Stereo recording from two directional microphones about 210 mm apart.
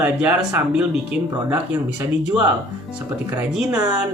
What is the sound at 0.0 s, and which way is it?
Speech, 5° right (ahead or behind).